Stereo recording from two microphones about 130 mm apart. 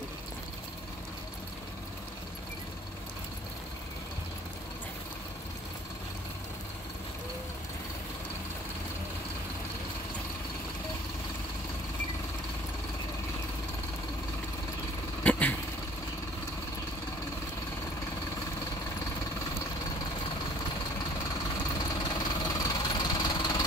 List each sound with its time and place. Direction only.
15.2 s vehicle: 10° left (ahead or behind)
22.0 s engine: 30° left (ahead or behind)